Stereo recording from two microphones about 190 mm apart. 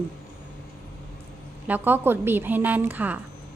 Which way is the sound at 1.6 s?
10° right (ahead or behind).